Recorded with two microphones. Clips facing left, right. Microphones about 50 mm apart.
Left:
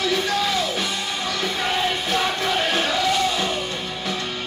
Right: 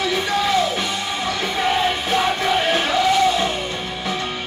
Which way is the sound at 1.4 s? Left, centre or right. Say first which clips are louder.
Right 4 dB; centre.